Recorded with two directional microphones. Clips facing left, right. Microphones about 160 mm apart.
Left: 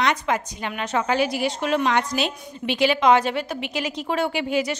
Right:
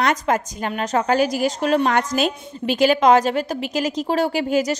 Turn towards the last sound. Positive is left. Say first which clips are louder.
# right 4 dB
turn(degrees=-40)  # may be behind; listen again after turning